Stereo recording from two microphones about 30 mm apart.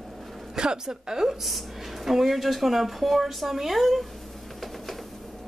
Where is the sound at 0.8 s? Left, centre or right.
Centre.